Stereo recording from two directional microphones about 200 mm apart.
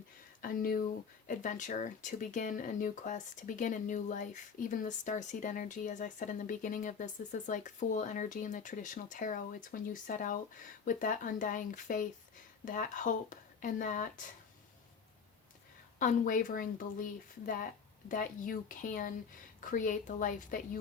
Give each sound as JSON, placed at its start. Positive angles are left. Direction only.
{"t": 0.4, "sound": "speech", "side_deg": 45}
{"t": 16.0, "sound": "speech", "side_deg": 40}